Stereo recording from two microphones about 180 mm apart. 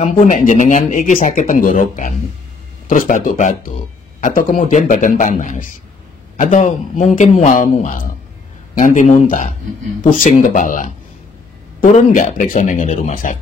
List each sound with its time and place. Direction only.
0.0 s speech: 40° left (ahead or behind)